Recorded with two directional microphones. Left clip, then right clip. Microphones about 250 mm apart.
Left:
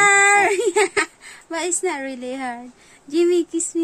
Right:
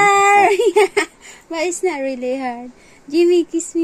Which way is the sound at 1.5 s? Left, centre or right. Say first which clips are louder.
Right 4 dB; left.